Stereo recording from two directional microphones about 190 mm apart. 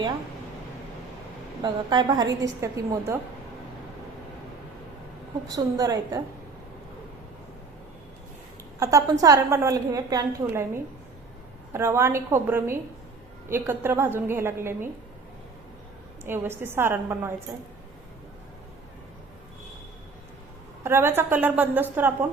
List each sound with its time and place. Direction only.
1.6 s a woman's voice: 20° right (ahead or behind)
5.5 s a woman's voice: 20° right (ahead or behind)
8.8 s a woman's voice: 15° right (ahead or behind)
11.7 s a woman's voice: 15° right (ahead or behind)
16.2 s a woman's voice: 10° right (ahead or behind)
20.8 s a woman's voice: 15° right (ahead or behind)